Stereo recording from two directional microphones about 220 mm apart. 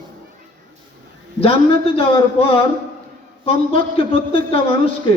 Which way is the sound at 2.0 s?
25° left (ahead or behind).